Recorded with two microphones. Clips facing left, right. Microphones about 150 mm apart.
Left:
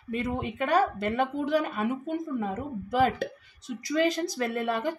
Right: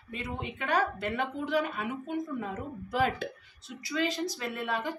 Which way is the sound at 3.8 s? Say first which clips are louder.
Left 5 dB; 45° left (ahead or behind).